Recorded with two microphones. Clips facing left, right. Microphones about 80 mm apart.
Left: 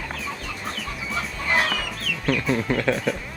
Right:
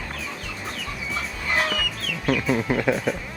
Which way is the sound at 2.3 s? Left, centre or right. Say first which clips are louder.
Right 1 dB; centre.